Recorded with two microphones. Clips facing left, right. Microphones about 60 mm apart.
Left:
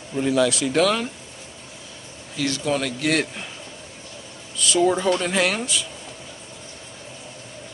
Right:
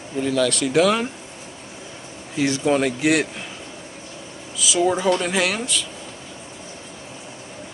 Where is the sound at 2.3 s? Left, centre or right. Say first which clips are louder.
Right 4 dB; right.